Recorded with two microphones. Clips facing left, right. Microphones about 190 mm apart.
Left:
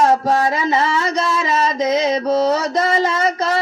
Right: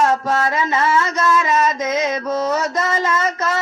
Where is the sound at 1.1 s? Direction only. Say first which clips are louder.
Right 1 dB; 30° left (ahead or behind).